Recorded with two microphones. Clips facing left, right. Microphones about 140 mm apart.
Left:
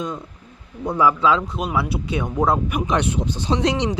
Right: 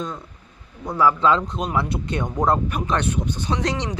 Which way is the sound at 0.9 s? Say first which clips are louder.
Left 1 dB; 15° left (ahead or behind).